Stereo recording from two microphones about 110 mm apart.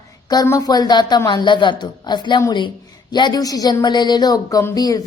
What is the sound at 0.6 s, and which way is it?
A woman's voice, 35° left (ahead or behind).